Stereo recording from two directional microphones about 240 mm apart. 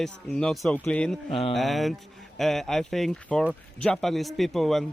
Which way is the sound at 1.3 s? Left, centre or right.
Left.